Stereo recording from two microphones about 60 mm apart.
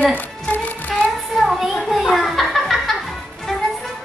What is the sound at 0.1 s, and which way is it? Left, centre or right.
Music, left.